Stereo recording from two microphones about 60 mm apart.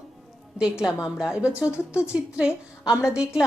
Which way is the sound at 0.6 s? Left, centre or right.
Centre.